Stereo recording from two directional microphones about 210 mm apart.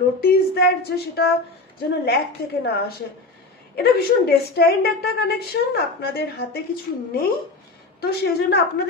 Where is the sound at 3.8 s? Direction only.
50° left (ahead or behind).